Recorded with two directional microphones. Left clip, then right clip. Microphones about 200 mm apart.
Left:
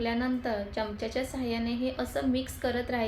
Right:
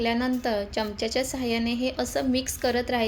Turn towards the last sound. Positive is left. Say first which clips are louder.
# right 5 dB
turn(degrees=-45)  # may be behind; listen again after turning